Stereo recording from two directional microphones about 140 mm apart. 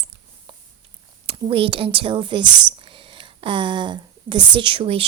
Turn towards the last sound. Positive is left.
turn(degrees=-40)  # may be behind; listen again after turning